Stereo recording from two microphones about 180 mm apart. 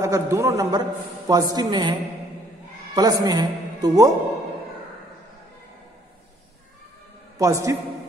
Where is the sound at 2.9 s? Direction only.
20° right (ahead or behind).